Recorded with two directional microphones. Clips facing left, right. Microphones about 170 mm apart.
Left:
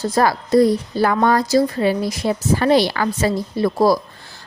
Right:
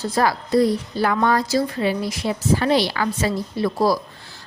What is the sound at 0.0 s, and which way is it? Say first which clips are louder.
A woman's voice: left 3 dB; 45° left (ahead or behind).